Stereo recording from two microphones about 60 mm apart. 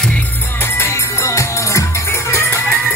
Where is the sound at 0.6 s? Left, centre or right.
Left.